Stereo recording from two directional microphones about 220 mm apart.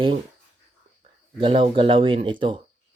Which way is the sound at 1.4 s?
25° right (ahead or behind).